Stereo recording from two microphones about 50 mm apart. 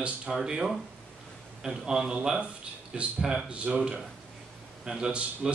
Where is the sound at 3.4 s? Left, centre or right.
Right.